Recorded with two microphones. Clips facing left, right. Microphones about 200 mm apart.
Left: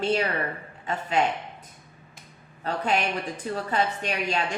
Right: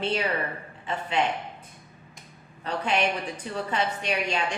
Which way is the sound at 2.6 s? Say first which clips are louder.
Even; 40° left (ahead or behind).